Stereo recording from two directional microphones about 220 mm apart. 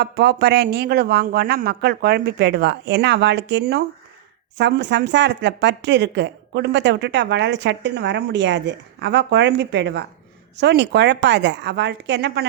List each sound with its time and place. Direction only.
0.0 s a woman's voice: 50° right (ahead or behind)